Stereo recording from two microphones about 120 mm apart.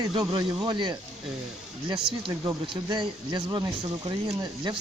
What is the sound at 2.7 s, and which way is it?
Speech, 40° right (ahead or behind).